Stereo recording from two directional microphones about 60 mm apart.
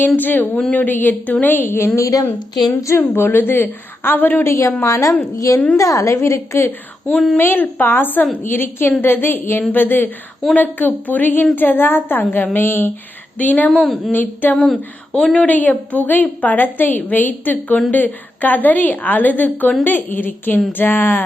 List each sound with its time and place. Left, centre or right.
0.2 s a woman's voice: left
2.0 s a woman's voice: left
2.6 s a woman's voice: left
3.0 s a woman's voice: left
4.4 s a woman's voice: left
7.1 s speech: centre
7.3 s a woman's voice: left
14.5 s speech: centre
15.4 s a woman's voice: left